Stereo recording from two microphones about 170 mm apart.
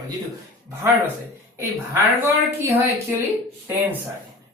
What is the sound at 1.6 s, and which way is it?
Speech, 15° right (ahead or behind).